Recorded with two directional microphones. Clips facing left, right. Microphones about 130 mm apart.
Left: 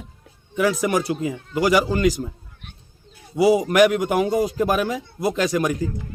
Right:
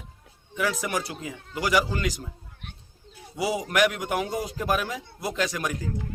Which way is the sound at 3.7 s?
40° left (ahead or behind).